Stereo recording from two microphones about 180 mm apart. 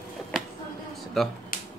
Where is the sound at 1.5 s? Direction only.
50° left (ahead or behind).